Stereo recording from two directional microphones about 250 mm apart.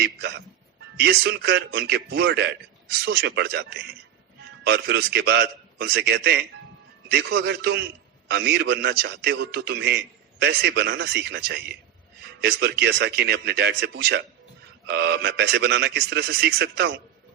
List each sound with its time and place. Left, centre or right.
0.0 s a man's voice: right